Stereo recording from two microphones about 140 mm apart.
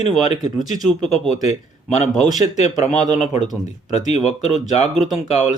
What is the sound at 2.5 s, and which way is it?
Speech, 55° left (ahead or behind).